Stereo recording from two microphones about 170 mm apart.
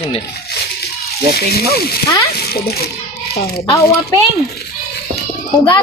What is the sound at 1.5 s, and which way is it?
A child's voice, 65° left (ahead or behind).